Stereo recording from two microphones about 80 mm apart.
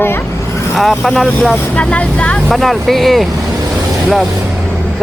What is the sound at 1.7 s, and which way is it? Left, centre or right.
Speech, centre.